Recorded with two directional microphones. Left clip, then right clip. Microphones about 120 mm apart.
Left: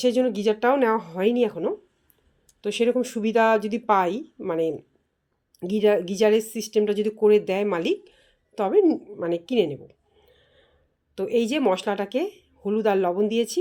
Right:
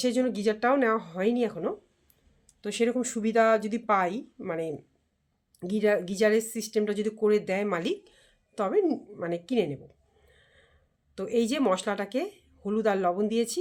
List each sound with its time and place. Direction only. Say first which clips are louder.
0.0 s speech: left 5 dB; 15° left (ahead or behind)
10.3 s a sound: right 2 dB; 15° left (ahead or behind)
11.1 s speech: left 4 dB; 15° left (ahead or behind)